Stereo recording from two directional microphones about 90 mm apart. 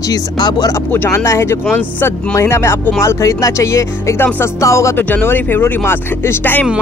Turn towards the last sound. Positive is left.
turn(degrees=25)  # may be behind; listen again after turning